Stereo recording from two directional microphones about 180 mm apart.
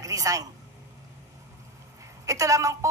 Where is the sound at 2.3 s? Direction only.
15° right (ahead or behind).